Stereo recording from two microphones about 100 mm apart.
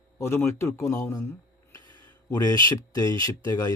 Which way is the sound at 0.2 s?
25° left (ahead or behind).